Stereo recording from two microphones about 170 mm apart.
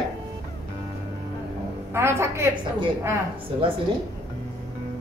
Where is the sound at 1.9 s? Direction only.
15° right (ahead or behind).